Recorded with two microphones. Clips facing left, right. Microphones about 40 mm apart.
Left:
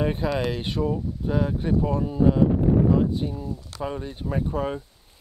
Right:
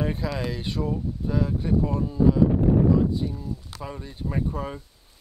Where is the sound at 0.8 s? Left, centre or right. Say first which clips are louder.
Left 2 dB; centre.